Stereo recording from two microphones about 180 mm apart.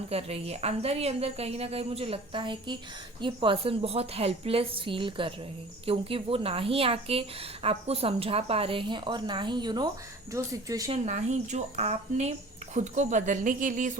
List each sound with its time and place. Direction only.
0.1 s a woman's voice: 35° right (ahead or behind); by 10.9 s 20° right (ahead or behind)
10.9 s a woman's voice: 40° right (ahead or behind)